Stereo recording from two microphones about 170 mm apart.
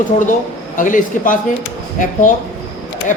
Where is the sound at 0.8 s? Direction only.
50° left (ahead or behind).